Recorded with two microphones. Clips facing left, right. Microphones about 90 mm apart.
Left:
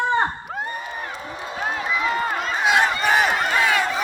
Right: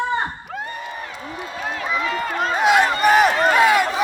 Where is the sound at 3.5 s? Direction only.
10° right (ahead or behind).